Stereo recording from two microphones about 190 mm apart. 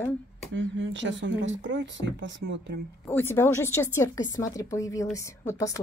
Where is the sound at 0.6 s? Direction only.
75° right (ahead or behind).